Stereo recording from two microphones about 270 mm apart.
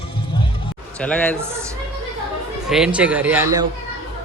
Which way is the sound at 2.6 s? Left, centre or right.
Centre.